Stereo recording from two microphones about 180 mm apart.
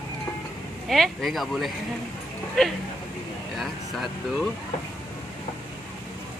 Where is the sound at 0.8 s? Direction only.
Centre (ahead or behind).